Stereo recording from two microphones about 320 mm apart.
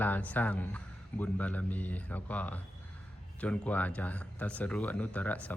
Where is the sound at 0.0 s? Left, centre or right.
Centre.